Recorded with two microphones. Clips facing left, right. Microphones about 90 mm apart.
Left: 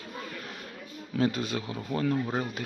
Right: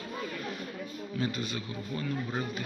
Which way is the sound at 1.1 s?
90° left.